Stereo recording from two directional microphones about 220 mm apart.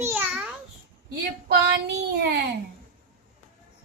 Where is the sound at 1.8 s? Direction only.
50° right (ahead or behind).